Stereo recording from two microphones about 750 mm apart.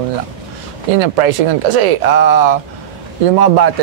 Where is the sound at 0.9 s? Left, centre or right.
Right.